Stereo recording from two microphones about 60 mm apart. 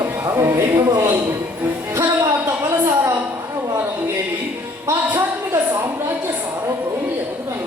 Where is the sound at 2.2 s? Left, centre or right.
Right.